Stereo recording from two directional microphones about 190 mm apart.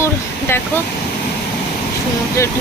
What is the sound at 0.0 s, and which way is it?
Air conditioning, 10° left (ahead or behind).